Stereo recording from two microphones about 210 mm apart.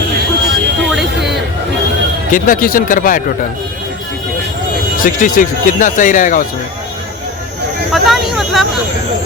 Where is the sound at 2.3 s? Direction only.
40° left (ahead or behind).